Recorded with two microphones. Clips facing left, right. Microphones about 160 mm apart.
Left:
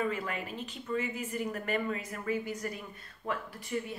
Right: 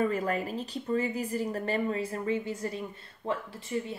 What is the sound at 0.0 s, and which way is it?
Speech, 40° right (ahead or behind).